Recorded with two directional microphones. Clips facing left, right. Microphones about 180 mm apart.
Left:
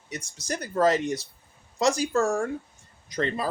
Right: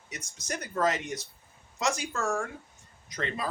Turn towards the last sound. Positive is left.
turn(degrees=35)  # may be behind; listen again after turning